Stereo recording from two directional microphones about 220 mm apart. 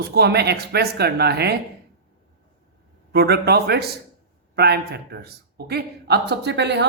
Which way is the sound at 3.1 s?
45° right (ahead or behind).